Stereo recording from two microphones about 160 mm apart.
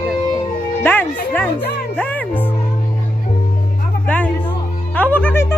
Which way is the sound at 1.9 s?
10° left (ahead or behind).